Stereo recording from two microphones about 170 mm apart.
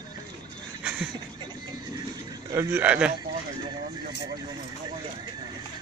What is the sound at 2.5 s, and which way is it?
Speech, 15° right (ahead or behind).